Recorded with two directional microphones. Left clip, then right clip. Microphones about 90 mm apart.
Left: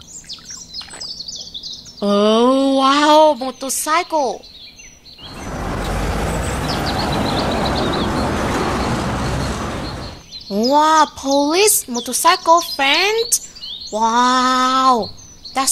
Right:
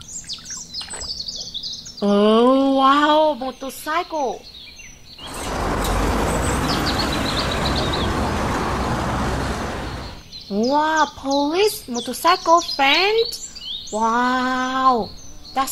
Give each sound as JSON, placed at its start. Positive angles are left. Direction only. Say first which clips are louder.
{"t": 0.3, "sound": "chirp", "louder": "even", "side_deg": -10}
{"t": 2.0, "sound": "a sound", "louder": "left 1 dB", "side_deg": 10}
{"t": 3.8, "sound": "speech", "louder": "left 5 dB", "side_deg": 25}
{"t": 5.3, "sound": "vehicle", "louder": "right 2 dB", "side_deg": 0}
{"t": 10.5, "sound": "speech", "louder": "left 5 dB", "side_deg": 20}
{"t": 12.7, "sound": "speech", "louder": "left 1 dB", "side_deg": 0}
{"t": 13.9, "sound": "a sound", "louder": "left 5 dB", "side_deg": 5}